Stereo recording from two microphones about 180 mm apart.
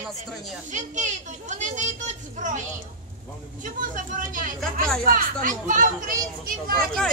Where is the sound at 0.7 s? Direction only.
45° right (ahead or behind).